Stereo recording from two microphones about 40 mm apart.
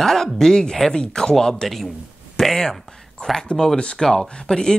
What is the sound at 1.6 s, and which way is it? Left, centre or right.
A man's voice, centre.